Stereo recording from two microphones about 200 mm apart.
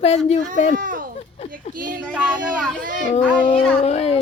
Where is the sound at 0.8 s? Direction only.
40° right (ahead or behind).